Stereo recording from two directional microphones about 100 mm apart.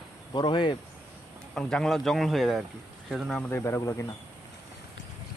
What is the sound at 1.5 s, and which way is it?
Speech, 5° left (ahead or behind).